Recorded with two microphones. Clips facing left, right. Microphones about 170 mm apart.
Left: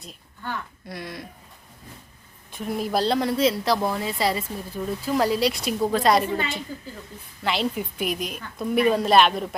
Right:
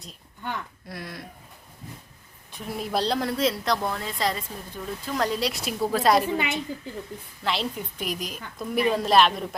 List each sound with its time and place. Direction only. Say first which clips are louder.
0.4 s a woman's voice: even; 20° right (ahead or behind)
0.9 s a woman's voice: left 2 dB; centre (ahead or behind)
2.5 s a woman's voice: left 4 dB; centre (ahead or behind)
6.3 s a woman's voice: even; 15° right (ahead or behind)
7.4 s a woman's voice: left 3 dB; centre (ahead or behind)